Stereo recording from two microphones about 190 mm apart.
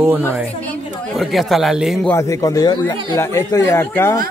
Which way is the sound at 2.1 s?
15° left (ahead or behind).